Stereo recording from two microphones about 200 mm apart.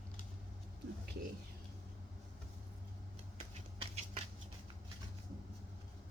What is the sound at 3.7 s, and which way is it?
Patter, 30° right (ahead or behind).